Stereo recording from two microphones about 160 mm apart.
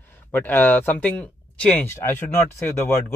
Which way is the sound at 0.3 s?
10° left (ahead or behind).